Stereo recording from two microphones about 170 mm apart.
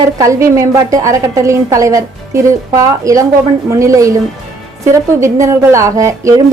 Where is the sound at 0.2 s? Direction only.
20° right (ahead or behind).